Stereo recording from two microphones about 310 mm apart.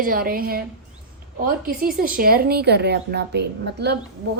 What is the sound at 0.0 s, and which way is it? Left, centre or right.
A woman's voice, right.